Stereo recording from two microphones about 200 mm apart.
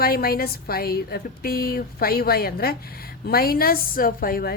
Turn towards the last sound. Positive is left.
turn(degrees=50)  # may be behind; listen again after turning